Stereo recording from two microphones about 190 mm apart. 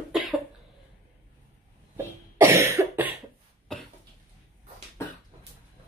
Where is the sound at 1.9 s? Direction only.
15° right (ahead or behind).